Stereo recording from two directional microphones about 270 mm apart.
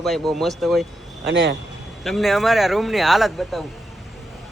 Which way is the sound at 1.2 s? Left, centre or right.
Right.